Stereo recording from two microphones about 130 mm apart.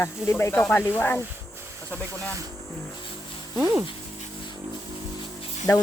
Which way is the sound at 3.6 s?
25° right (ahead or behind).